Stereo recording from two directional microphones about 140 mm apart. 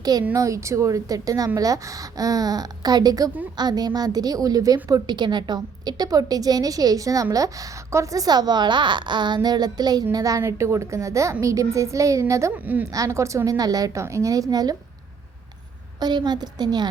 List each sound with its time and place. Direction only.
0.0 s a woman's voice: 25° right (ahead or behind)
16.0 s a woman's voice: 30° right (ahead or behind)